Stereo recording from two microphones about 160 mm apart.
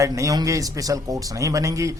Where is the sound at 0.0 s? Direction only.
20° right (ahead or behind).